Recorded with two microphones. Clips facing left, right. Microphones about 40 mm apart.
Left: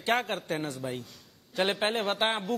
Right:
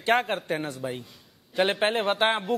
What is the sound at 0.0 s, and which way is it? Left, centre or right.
A woman's voice, centre.